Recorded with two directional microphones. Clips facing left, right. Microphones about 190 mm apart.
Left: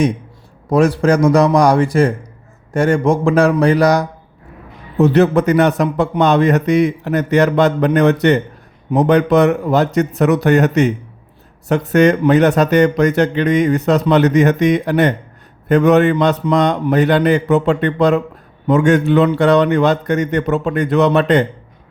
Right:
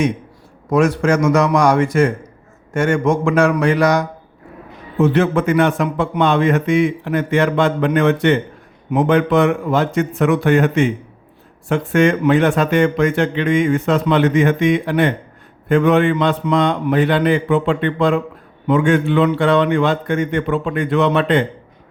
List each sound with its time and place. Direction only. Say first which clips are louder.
0.7 s speech: left 2 dB; 35° left (ahead or behind)